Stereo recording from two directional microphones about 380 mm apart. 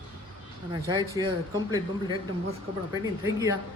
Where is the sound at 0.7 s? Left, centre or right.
Centre.